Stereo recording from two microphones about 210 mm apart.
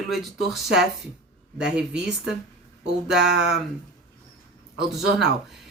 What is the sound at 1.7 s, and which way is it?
Speech, 5° right (ahead or behind).